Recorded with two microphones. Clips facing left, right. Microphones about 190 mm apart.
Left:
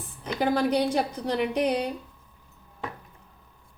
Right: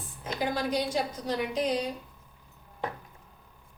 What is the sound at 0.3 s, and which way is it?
A woman's voice, 65° left (ahead or behind).